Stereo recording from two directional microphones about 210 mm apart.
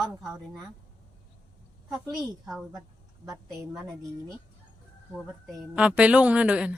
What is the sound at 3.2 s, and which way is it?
Speech, 15° right (ahead or behind).